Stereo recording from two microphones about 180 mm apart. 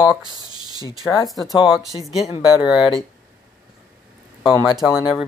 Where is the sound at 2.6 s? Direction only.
5° right (ahead or behind).